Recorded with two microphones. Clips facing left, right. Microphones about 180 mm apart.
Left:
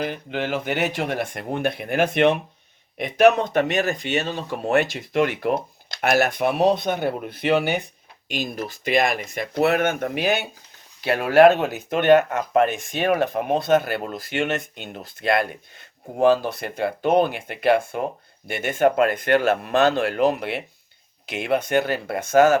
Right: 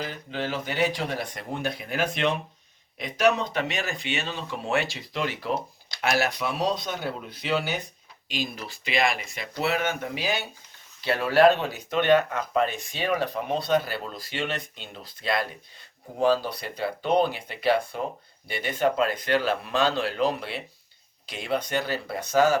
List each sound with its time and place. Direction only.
0.0 s speech: 60° left (ahead or behind)
8.3 s speech: 50° left (ahead or behind)